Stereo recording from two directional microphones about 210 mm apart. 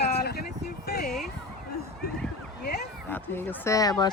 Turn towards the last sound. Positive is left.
turn(degrees=20)  # may be behind; listen again after turning